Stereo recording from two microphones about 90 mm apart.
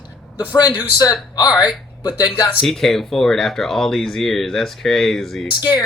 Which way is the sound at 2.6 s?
Centre (ahead or behind).